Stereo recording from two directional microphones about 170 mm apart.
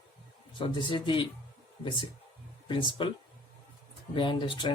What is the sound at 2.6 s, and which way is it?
Speech, 30° left (ahead or behind).